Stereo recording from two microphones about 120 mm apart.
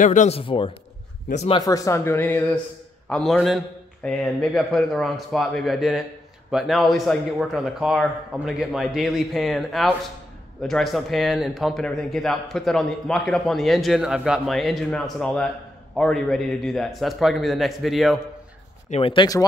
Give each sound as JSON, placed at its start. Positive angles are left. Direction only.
{"t": 0.0, "sound": "speech", "side_deg": 90}
{"t": 0.4, "sound": "a man's voice", "side_deg": 45}
{"t": 1.6, "sound": "a man's voice", "side_deg": 25}
{"t": 18.9, "sound": "a man's voice", "side_deg": 50}